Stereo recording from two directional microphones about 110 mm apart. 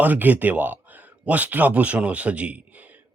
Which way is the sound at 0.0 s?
15° right (ahead or behind).